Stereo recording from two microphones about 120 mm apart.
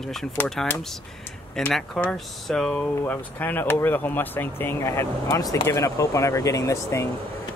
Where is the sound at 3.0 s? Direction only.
15° left (ahead or behind).